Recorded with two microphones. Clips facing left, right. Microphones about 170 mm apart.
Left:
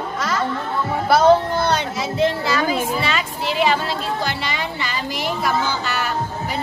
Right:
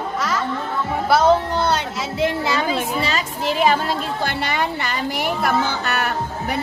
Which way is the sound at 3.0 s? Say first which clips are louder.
Right 1 dB; 40° right (ahead or behind).